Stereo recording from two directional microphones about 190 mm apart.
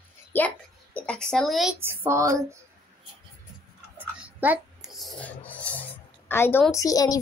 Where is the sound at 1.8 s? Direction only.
15° right (ahead or behind).